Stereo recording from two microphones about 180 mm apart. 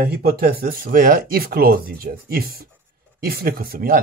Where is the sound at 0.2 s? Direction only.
55° right (ahead or behind).